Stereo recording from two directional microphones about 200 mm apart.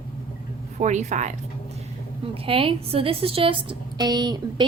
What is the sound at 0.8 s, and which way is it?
Speech, 35° right (ahead or behind).